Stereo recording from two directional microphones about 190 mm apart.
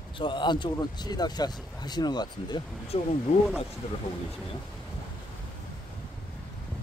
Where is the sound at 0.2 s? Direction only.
25° left (ahead or behind).